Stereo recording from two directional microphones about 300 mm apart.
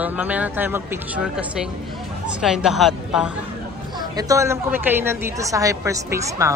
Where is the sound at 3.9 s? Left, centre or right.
Centre.